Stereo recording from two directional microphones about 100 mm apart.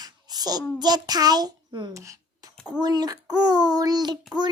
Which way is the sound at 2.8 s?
45° right (ahead or behind).